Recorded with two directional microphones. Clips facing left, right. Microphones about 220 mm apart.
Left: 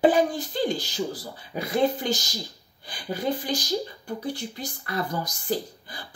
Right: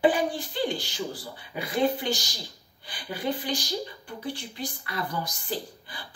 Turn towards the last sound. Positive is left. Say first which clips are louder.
# left 5 dB
turn(degrees=45)  # may be behind; listen again after turning